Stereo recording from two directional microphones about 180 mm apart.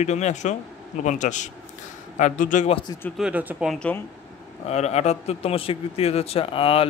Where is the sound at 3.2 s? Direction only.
5° right (ahead or behind).